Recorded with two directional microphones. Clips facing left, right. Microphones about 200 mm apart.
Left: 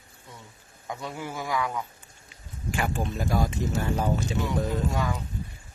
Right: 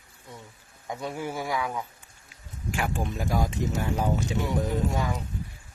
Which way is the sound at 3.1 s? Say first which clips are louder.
Left 1 dB; 15° right (ahead or behind).